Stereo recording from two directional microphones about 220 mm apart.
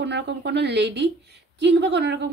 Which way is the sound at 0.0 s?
50° right (ahead or behind).